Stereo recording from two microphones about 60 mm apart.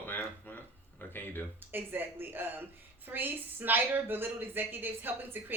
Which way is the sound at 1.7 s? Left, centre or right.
Right.